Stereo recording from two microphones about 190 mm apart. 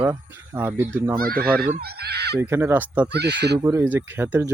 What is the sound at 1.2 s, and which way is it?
Speech, 50° right (ahead or behind).